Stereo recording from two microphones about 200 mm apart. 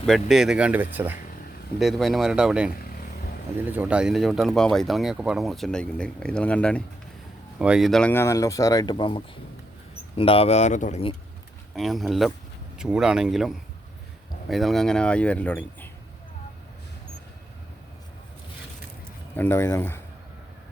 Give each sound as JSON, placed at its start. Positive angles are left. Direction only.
{"t": 0.0, "sound": "speech", "side_deg": 0}
{"t": 11.7, "sound": "speech", "side_deg": 0}
{"t": 19.4, "sound": "speech", "side_deg": 10}